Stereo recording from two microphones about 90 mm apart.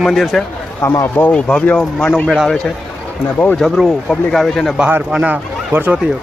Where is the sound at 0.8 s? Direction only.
30° left (ahead or behind).